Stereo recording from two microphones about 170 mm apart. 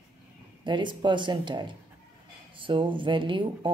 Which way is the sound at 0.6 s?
25° right (ahead or behind).